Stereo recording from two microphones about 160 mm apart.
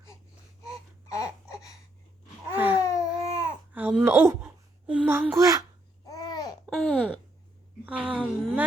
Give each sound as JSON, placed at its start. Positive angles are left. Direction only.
{"t": 1.0, "sound": "a sound", "side_deg": 20}
{"t": 2.8, "sound": "baby cry", "side_deg": 20}
{"t": 3.8, "sound": "speech", "side_deg": -10}
{"t": 6.1, "sound": "babbling", "side_deg": 25}
{"t": 6.7, "sound": "a woman's voice", "side_deg": 0}